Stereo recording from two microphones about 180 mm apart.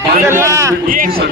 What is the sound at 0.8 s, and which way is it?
Speech, 50° right (ahead or behind).